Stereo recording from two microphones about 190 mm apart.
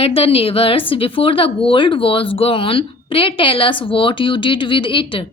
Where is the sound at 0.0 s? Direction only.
30° left (ahead or behind).